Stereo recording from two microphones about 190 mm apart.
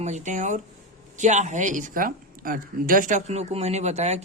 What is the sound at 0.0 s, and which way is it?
Speech, 40° right (ahead or behind).